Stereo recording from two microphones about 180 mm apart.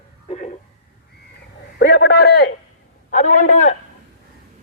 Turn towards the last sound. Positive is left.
turn(degrees=40)  # may be behind; listen again after turning